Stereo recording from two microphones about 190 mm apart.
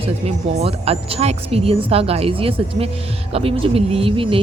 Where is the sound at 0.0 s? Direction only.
30° right (ahead or behind).